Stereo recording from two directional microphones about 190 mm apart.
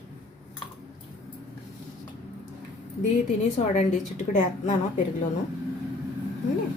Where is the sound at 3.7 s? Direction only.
40° left (ahead or behind).